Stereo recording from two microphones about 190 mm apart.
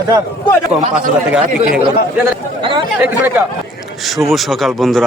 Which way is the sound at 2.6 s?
25° right (ahead or behind).